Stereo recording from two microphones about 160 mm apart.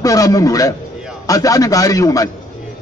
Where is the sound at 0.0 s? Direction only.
20° left (ahead or behind).